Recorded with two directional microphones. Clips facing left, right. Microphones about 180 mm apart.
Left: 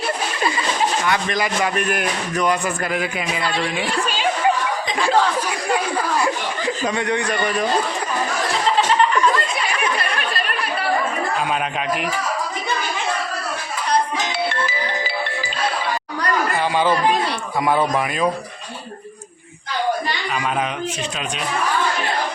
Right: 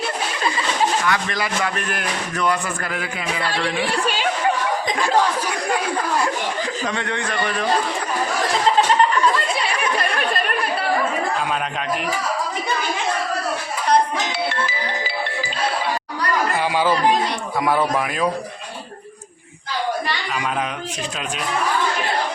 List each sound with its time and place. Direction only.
1.0 s speech: 20° left (ahead or behind)
6.8 s speech: 10° left (ahead or behind)
16.6 s chatter: 10° right (ahead or behind)
17.6 s speech: centre (ahead or behind)